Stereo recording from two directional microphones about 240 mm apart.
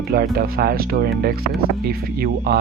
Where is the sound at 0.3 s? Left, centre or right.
Right.